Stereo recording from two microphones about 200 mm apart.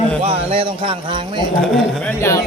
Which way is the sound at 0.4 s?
25° right (ahead or behind).